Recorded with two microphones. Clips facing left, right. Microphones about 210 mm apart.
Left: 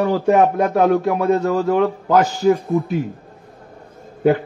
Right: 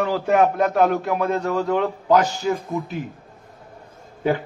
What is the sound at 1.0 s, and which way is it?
Speech, 45° left (ahead or behind).